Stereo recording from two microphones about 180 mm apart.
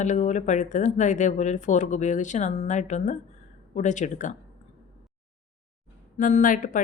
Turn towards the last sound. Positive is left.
turn(degrees=45)  # may be behind; listen again after turning